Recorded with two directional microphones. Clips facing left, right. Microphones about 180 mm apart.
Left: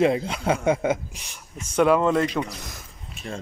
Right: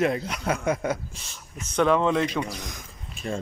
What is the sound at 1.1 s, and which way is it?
Speech, 15° left (ahead or behind).